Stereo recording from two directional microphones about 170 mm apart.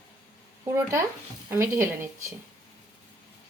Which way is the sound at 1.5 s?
15° right (ahead or behind).